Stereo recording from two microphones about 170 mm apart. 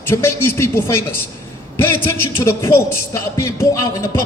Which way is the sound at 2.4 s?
15° left (ahead or behind).